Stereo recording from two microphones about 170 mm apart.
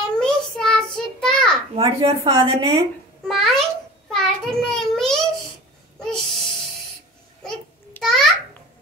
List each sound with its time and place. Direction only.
0.2 s child singing: 5° left (ahead or behind)
1.8 s a woman's voice: 35° right (ahead or behind)
3.3 s babbling: centre (ahead or behind)
4.1 s child singing: 5° left (ahead or behind)
5.9 s a sound: centre (ahead or behind)
7.4 s babbling: 5° left (ahead or behind)